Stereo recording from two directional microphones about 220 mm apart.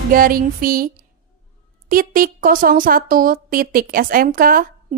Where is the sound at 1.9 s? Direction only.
40° right (ahead or behind).